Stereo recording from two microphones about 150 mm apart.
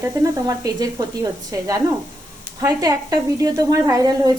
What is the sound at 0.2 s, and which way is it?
A woman's voice, 25° right (ahead or behind).